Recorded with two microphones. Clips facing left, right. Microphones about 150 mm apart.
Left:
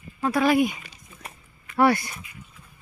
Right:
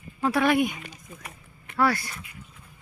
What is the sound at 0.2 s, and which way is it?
Speech, centre (ahead or behind).